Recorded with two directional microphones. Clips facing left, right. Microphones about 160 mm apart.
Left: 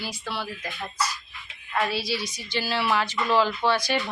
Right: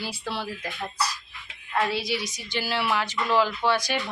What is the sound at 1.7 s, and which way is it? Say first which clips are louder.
Speech: right 1 dB; 20° right (ahead or behind).